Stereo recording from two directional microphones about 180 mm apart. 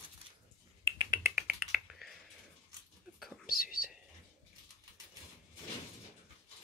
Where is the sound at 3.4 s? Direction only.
55° left (ahead or behind).